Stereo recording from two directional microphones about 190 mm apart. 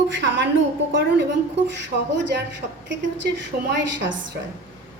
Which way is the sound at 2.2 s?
65° right (ahead or behind).